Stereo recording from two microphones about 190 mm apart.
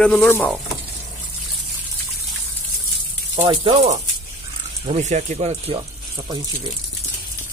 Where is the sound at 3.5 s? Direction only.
35° right (ahead or behind).